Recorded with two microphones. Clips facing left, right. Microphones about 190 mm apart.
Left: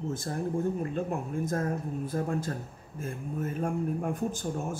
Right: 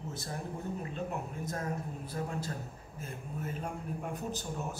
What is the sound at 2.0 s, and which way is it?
Speech, 50° left (ahead or behind).